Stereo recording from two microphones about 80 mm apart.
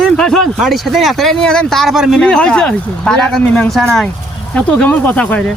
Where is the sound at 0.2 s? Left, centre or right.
Centre.